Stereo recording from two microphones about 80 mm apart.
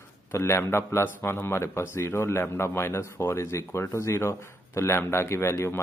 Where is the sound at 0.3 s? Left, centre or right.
Left.